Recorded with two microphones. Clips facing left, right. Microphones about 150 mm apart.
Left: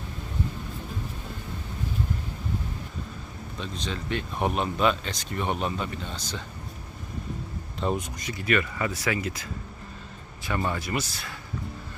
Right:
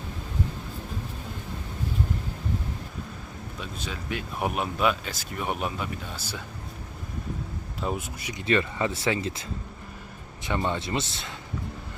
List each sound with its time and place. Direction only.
3.6 s speech: 10° right (ahead or behind)
7.8 s speech: 5° right (ahead or behind)
8.3 s speech: 25° right (ahead or behind)